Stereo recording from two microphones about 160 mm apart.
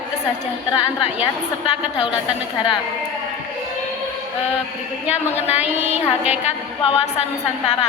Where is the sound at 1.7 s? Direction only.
35° left (ahead or behind).